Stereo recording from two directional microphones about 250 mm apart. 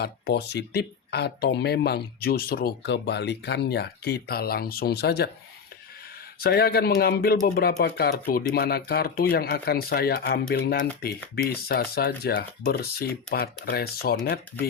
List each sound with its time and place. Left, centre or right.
0.0 s speech: left
6.4 s speech: left